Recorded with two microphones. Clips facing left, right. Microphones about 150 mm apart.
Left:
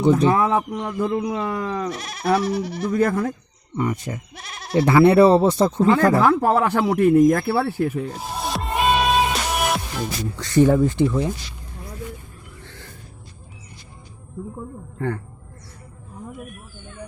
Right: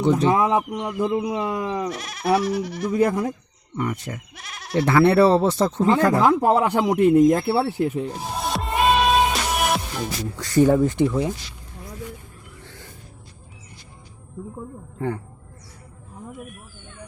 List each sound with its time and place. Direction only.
0.3 s speech: 15° right (ahead or behind)
1.9 s speech: 30° left (ahead or behind)
2.9 s speech: 15° right (ahead or behind)
3.8 s speech: 15° left (ahead or behind)
4.4 s goat: 30° left (ahead or behind)
4.9 s speech: 15° left (ahead or behind)
6.1 s speech: 15° right (ahead or behind)
8.4 s music: centre (ahead or behind)
10.5 s speech: 20° right (ahead or behind)
12.6 s a sound: 10° right (ahead or behind)
14.9 s speech: 15° right (ahead or behind)